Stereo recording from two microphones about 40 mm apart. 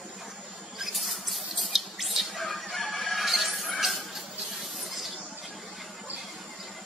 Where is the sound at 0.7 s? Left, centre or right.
Centre.